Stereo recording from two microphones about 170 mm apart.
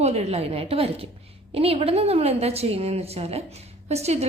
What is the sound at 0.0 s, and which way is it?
A woman's voice, 40° right (ahead or behind).